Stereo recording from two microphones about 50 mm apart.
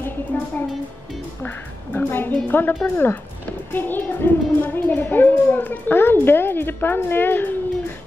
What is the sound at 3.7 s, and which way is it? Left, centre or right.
A woman's voice, left.